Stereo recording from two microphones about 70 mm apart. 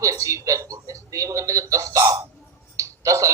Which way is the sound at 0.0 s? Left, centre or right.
Right.